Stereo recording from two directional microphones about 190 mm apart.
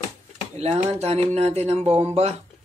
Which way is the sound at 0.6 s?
35° right (ahead or behind).